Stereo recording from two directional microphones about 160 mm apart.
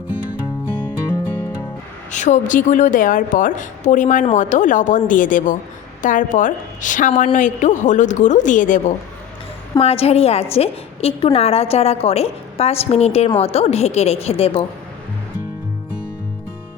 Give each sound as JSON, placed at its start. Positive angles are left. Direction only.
{"t": 2.1, "sound": "a woman's voice", "side_deg": 50}
{"t": 9.7, "sound": "a woman's voice", "side_deg": 40}